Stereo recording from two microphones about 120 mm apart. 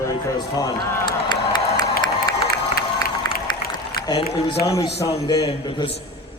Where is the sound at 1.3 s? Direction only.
40° left (ahead or behind).